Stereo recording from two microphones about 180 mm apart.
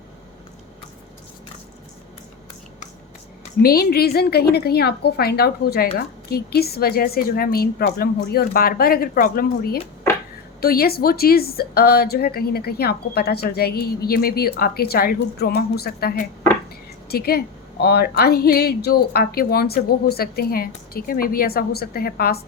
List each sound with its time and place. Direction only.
3.6 s speech: 60° left (ahead or behind)